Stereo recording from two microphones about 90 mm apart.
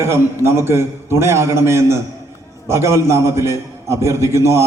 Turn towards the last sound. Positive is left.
turn(degrees=-30)  # may be behind; listen again after turning